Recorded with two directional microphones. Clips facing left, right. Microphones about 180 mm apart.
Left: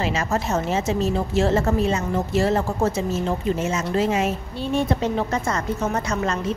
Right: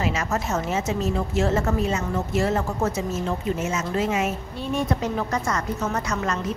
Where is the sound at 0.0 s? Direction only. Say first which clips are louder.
Left 2 dB; 30° left (ahead or behind).